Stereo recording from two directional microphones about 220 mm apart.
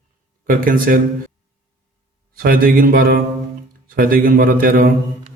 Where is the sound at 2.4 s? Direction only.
40° right (ahead or behind).